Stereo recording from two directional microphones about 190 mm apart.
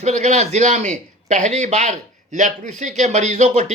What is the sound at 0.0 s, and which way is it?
A man's voice, 35° right (ahead or behind).